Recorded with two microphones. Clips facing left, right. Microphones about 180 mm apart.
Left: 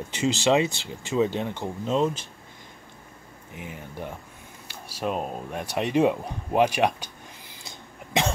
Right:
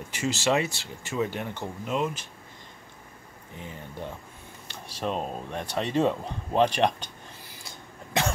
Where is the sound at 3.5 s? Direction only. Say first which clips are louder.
Left 2 dB; 15° left (ahead or behind).